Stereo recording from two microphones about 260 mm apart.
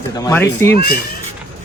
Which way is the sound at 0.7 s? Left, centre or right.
Left.